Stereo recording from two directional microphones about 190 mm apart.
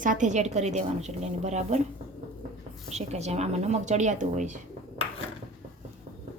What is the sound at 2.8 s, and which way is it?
A woman's voice, 35° right (ahead or behind).